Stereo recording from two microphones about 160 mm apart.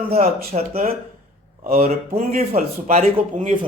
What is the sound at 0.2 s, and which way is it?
Speech, 70° right (ahead or behind).